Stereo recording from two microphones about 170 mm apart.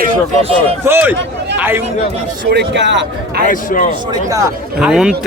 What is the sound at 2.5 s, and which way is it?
Speech, 85° right.